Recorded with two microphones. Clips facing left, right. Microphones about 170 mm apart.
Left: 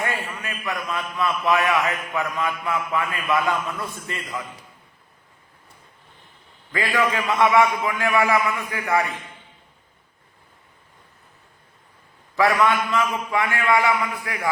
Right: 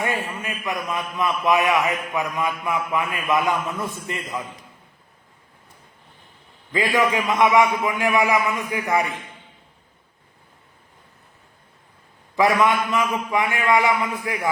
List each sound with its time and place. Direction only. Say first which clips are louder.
0.0 s a man's voice: right 2 dB; 15° right (ahead or behind)
6.7 s a man's voice: right 2 dB; 20° right (ahead or behind)
12.4 s a man's voice: right 1 dB; 20° right (ahead or behind)